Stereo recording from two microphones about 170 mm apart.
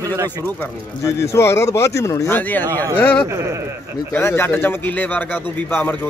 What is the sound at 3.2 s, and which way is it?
Speech, 15° right (ahead or behind).